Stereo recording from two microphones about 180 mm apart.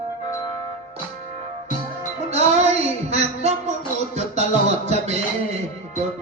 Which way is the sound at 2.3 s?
35° right (ahead or behind).